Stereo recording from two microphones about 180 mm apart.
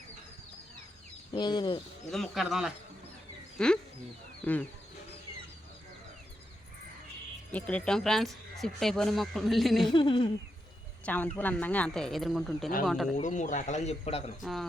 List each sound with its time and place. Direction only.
1.3 s speech: 25° left (ahead or behind)
2.0 s speech: centre (ahead or behind)
7.5 s speech: 5° left (ahead or behind)
9.9 s speech: 25° left (ahead or behind)
11.0 s speech: 10° left (ahead or behind)
13.1 s speech: 45° left (ahead or behind)
14.4 s speech: centre (ahead or behind)